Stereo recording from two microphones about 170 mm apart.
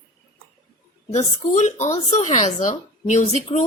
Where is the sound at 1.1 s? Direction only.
40° left (ahead or behind).